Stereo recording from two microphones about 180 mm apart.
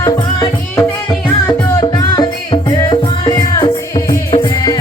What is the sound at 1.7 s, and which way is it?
Music, 25° left (ahead or behind).